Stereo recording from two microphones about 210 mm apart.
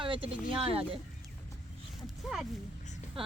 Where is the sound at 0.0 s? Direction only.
25° right (ahead or behind).